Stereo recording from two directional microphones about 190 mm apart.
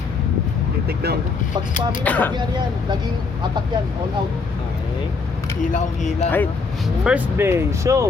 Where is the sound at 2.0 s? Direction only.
10° left (ahead or behind).